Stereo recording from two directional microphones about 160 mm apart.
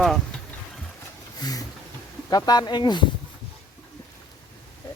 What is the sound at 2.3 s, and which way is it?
Speech, 25° left (ahead or behind).